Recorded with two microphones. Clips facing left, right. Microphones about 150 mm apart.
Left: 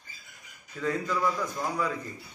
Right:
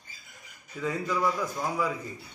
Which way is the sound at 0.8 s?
5° right (ahead or behind).